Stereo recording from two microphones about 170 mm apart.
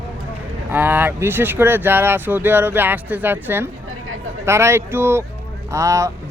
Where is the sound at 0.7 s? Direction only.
10° right (ahead or behind).